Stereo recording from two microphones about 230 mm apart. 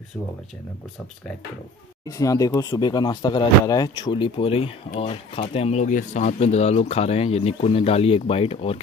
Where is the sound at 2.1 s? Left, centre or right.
Centre.